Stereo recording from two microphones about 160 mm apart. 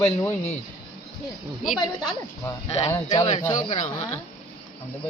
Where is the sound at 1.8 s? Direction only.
25° left (ahead or behind).